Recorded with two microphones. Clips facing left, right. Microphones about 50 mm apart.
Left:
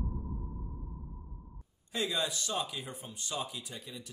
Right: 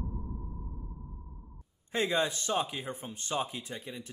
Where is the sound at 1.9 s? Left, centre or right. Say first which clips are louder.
Right 4 dB; right.